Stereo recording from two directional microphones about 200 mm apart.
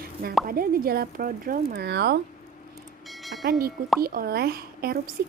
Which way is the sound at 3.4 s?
50° right (ahead or behind).